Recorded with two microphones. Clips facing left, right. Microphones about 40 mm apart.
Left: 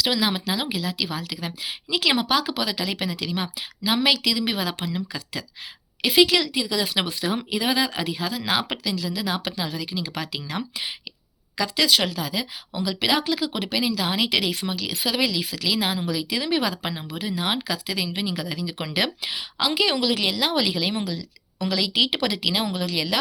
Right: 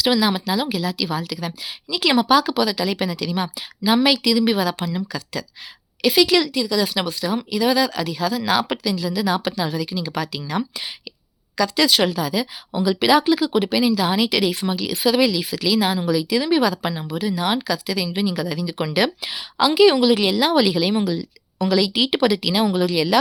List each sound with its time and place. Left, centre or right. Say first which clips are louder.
0.2 s a woman's voice: right 4 dB; centre
6.2 s speech: right 4 dB; centre
6.5 s a woman's voice: right 4 dB; left; by 10.6 s centre
11.8 s speech: right 3 dB; centre
12.7 s speech: right 7 dB; centre
14.6 s a woman's voice: right 6 dB; centre
20.0 s a woman's voice: right 6 dB; centre
22.6 s a woman's voice: right 7 dB; centre